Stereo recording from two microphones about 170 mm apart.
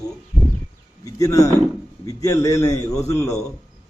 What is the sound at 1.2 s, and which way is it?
A man's voice, 20° left (ahead or behind).